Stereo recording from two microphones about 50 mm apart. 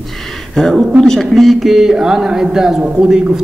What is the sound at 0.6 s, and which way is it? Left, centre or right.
Speech, centre.